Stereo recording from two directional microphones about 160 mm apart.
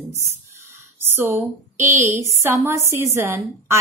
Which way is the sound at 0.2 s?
15° right (ahead or behind).